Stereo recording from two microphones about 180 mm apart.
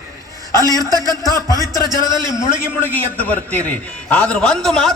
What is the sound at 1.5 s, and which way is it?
Speech, 20° right (ahead or behind).